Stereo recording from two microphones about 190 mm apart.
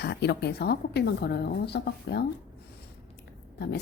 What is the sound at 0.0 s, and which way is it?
Speech, 60° left (ahead or behind).